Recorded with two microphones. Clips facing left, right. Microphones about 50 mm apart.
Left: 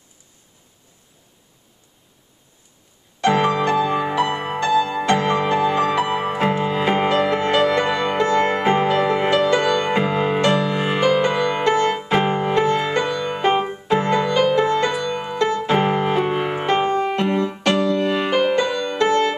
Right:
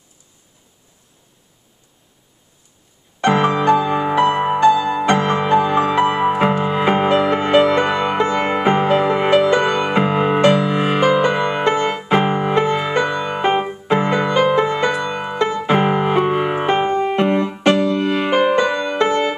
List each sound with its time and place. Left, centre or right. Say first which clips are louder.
3.3 s music: right 3 dB; centre